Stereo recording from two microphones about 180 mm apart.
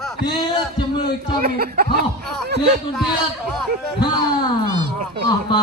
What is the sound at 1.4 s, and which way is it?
Speech, 60° right (ahead or behind).